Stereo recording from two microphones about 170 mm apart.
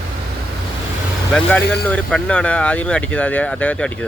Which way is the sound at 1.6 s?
85° left.